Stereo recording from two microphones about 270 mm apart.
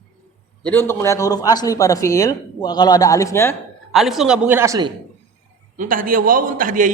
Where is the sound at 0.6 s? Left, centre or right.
Centre.